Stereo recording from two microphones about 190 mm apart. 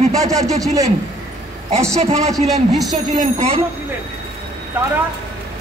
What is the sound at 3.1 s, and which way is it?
Speech, 35° right (ahead or behind).